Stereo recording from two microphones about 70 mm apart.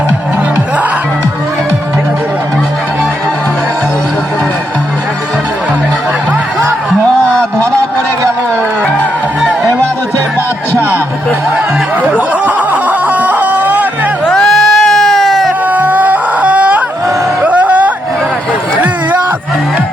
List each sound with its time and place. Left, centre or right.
12.1 s music: right
14.3 s a sound: centre
15.6 s whimper: right
17.4 s music: centre